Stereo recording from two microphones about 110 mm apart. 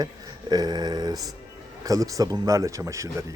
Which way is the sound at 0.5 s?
40° right (ahead or behind).